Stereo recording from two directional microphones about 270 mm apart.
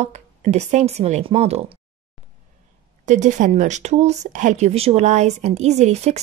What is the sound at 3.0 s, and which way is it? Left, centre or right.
Speech, right.